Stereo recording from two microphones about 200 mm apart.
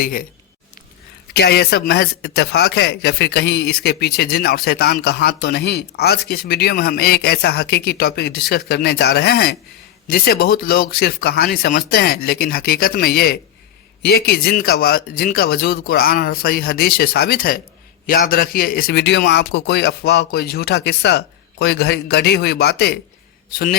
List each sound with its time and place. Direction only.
0.0 s speech: 45° left (ahead or behind)
1.3 s speech: 55° left (ahead or behind)